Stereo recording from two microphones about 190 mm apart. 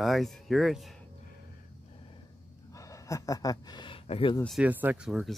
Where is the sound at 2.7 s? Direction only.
15° left (ahead or behind).